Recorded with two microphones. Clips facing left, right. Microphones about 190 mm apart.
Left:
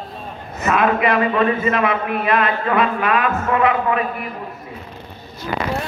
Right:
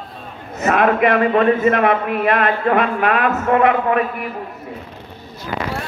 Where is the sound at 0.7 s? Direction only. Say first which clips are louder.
Right 2 dB; 55° right (ahead or behind).